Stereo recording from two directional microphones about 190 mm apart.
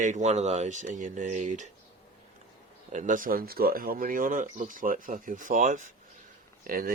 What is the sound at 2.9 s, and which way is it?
Speech, 40° right (ahead or behind).